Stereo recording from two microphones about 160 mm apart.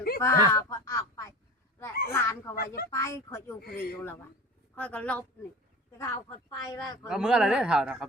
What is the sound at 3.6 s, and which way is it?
Speech, 80° left.